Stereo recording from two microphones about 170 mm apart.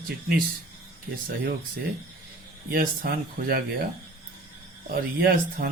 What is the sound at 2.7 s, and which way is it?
Speech, 60° right (ahead or behind).